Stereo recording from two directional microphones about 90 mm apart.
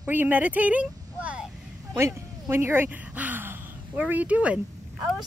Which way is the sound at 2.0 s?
30° right (ahead or behind).